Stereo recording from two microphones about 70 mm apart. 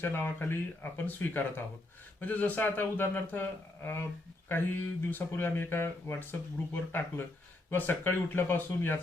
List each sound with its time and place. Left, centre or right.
0.0 s speech: left
4.4 s speech: left